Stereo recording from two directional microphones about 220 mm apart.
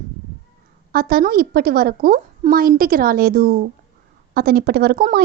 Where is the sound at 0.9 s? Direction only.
45° right (ahead or behind).